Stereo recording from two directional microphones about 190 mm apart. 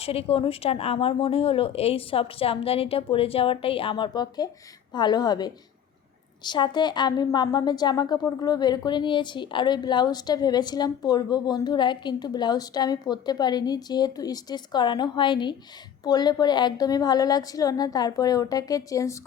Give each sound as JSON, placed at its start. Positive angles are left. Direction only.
{"t": 0.0, "sound": "a woman's voice", "side_deg": 30}